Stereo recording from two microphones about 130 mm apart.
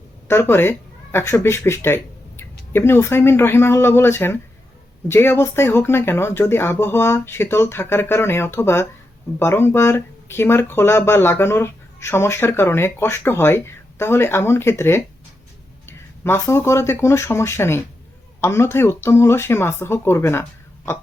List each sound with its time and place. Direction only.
0.3 s speech: 20° left (ahead or behind)